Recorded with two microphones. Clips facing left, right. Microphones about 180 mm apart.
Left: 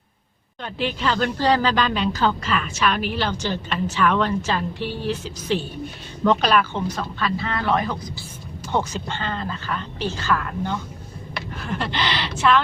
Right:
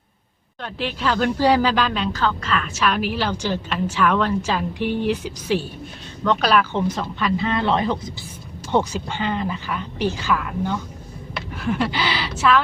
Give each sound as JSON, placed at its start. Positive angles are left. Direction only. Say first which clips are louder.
{"t": 0.6, "sound": "a woman's voice", "louder": "even", "side_deg": 0}
{"t": 2.1, "sound": "a woman's voice", "louder": "left 1 dB", "side_deg": 10}
{"t": 2.7, "sound": "a woman's voice", "louder": "right 2 dB", "side_deg": -5}
{"t": 4.8, "sound": "a woman's voice", "louder": "right 6 dB", "side_deg": -55}
{"t": 5.0, "sound": "speech", "louder": "right 2 dB", "side_deg": -10}
{"t": 8.7, "sound": "a woman's voice", "louder": "right 3 dB", "side_deg": -15}